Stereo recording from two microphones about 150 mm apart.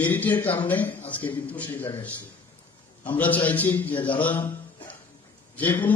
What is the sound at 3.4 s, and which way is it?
A man's voice, 10° left (ahead or behind).